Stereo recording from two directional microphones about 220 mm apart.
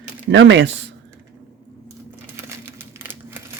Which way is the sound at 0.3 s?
55° right (ahead or behind).